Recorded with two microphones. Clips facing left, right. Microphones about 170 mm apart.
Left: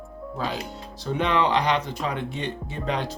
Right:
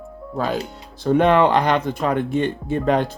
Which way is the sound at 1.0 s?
55° right (ahead or behind).